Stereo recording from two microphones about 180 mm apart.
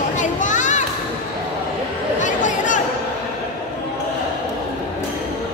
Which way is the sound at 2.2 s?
45° left (ahead or behind).